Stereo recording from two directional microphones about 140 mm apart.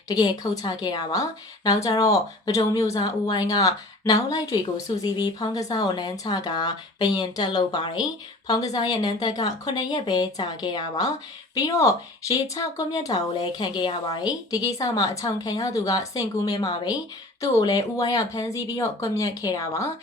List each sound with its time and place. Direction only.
0.1 s a woman's voice: 30° left (ahead or behind)